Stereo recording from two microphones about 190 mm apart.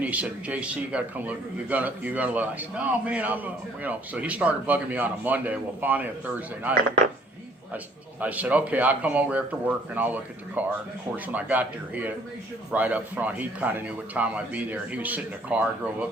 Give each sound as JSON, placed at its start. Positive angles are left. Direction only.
{"t": 0.0, "sound": "a man's voice", "side_deg": -5}
{"t": 8.2, "sound": "a man's voice", "side_deg": -10}